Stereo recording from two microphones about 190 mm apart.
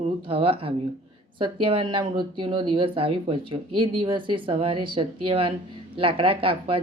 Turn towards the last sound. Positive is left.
turn(degrees=-30)  # may be behind; listen again after turning